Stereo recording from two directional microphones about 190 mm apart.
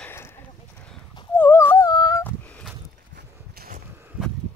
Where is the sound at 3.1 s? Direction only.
50° right (ahead or behind).